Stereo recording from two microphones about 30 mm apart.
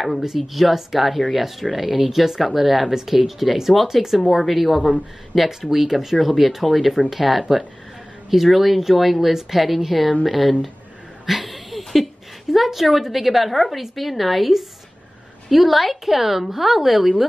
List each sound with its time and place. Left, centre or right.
0.2 s a woman's voice: centre
2.9 s a woman's voice: centre
11.2 s a sound: centre
12.5 s a woman's voice: centre